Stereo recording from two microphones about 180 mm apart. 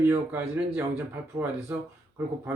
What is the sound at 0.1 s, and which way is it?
Speech, 10° right (ahead or behind).